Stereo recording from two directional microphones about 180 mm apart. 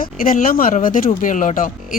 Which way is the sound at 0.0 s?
50° left (ahead or behind).